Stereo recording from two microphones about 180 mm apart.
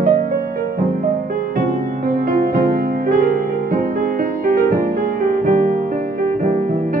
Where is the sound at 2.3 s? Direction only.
55° right (ahead or behind).